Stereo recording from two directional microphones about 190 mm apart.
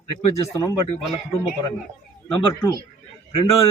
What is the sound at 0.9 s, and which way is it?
Speech, 30° left (ahead or behind).